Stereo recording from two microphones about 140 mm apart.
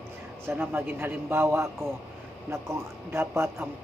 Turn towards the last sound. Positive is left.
turn(degrees=-20)  # may be behind; listen again after turning